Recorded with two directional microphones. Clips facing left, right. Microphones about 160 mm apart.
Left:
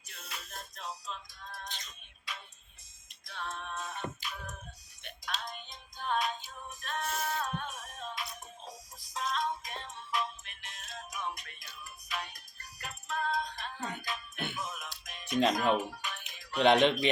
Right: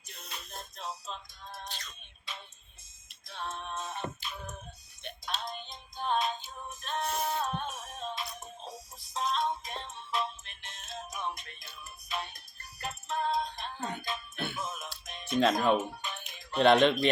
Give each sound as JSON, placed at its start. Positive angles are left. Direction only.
{"t": 0.3, "sound": "music", "side_deg": -30}